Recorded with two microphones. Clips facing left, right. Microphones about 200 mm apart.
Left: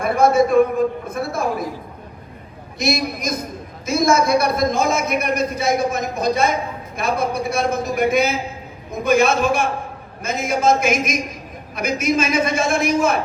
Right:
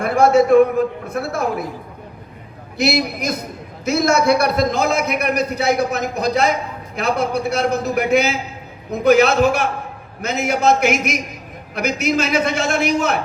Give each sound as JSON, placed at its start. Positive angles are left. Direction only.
{"t": 0.0, "sound": "a man's voice", "side_deg": -70}
{"t": 2.7, "sound": "a man's voice", "side_deg": -70}